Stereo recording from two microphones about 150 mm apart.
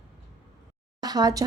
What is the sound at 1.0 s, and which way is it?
Speech, 25° right (ahead or behind).